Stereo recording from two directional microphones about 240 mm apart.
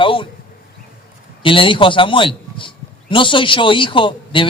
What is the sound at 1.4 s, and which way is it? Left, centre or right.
A man's voice, left.